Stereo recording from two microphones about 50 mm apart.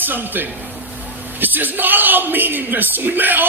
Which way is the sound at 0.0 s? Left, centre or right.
Right.